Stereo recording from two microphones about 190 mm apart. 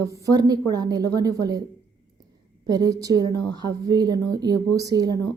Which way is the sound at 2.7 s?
20° right (ahead or behind).